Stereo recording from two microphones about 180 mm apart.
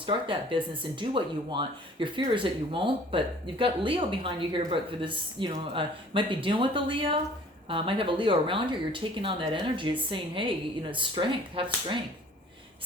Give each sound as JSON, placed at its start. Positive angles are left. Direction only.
{"t": 0.0, "sound": "speech", "side_deg": -30}